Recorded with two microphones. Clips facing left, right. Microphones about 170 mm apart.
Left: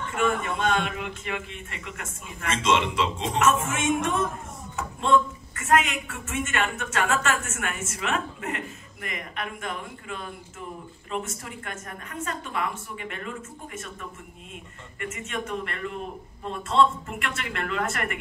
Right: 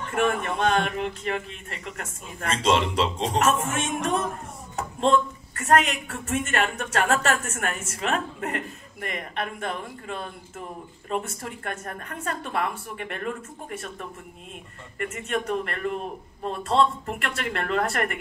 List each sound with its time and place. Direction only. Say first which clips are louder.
0.6 s a woman's voice: right 3 dB; 40° right (ahead or behind)
11.2 s a woman's voice: right 3 dB; 55° right (ahead or behind)
15.0 s a woman's voice: right 4 dB; 35° right (ahead or behind)